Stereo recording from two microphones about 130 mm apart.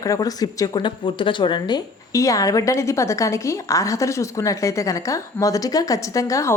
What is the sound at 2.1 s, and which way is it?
A woman's voice, 25° left (ahead or behind).